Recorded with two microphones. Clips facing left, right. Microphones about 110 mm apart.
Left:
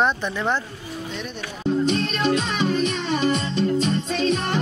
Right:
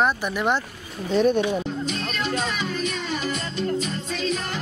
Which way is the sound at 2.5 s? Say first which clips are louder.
Left 5 dB; 30° left (ahead or behind).